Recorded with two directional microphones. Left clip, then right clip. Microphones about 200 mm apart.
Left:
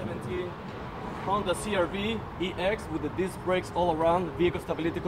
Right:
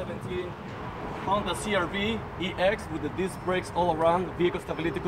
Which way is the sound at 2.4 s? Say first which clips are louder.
Right 3 dB; 20° right (ahead or behind).